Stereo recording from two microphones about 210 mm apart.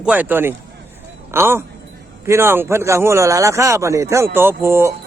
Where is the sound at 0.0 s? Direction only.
5° right (ahead or behind).